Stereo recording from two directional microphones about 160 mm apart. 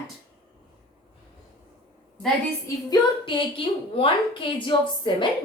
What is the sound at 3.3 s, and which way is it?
A woman's voice, 35° left (ahead or behind).